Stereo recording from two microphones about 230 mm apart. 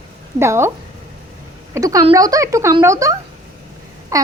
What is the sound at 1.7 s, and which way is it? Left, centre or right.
Speech, centre.